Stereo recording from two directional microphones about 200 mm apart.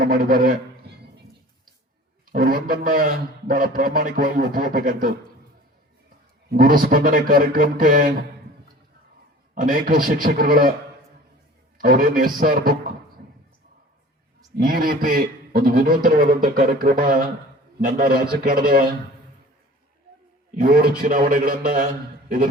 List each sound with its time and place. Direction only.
0.0 s speech: 40° right (ahead or behind)
2.3 s a man's voice: 40° right (ahead or behind)
9.6 s speech: 45° right (ahead or behind)
11.8 s speech: 40° right (ahead or behind)
14.6 s a man's voice: 45° right (ahead or behind)
20.6 s speech: 45° right (ahead or behind)